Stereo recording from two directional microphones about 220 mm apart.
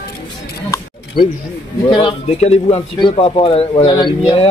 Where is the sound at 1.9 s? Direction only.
25° left (ahead or behind).